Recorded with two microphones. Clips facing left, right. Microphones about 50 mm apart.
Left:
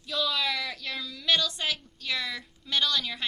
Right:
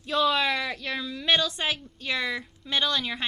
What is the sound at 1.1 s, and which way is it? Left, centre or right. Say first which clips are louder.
A woman's voice: right 2 dB; right.